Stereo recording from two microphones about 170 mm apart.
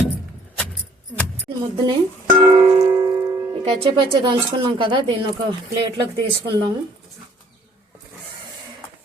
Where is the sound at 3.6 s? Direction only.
30° right (ahead or behind).